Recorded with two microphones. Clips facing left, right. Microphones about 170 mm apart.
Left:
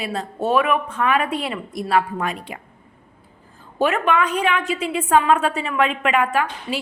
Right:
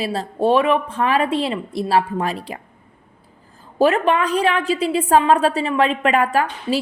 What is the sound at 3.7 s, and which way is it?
A woman's voice, 35° right (ahead or behind).